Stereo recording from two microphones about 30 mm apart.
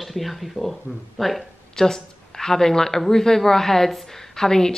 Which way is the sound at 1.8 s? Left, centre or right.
Centre.